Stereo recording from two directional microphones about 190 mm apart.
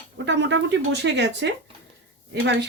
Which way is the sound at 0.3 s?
70° right (ahead or behind).